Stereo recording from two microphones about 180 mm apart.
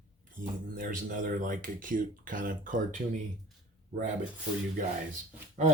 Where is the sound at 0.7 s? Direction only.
50° right (ahead or behind).